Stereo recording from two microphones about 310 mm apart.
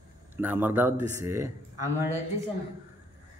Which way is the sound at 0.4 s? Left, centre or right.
Centre.